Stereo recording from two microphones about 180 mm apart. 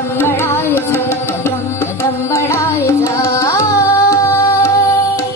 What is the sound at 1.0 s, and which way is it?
Music, 15° left (ahead or behind).